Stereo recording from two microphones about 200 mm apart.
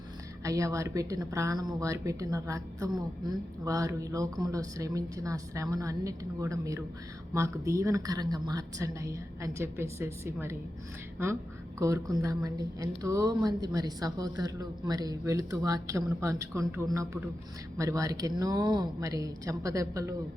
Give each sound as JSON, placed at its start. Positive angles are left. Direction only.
{"t": 0.4, "sound": "a woman's voice", "side_deg": -15}